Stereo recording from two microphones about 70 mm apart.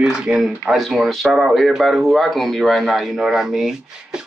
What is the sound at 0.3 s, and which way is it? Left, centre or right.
Speech, centre.